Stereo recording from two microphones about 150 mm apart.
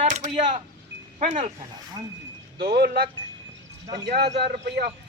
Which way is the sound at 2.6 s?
90° right.